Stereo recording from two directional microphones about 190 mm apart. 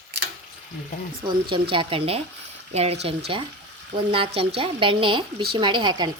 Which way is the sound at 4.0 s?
30° right (ahead or behind).